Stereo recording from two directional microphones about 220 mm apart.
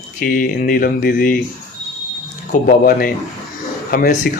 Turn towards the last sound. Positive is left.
turn(degrees=40)  # may be behind; listen again after turning